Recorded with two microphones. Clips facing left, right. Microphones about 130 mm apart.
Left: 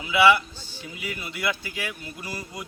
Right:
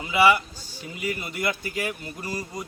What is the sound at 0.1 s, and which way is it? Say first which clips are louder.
Speech: left 1 dB; 45° right (ahead or behind).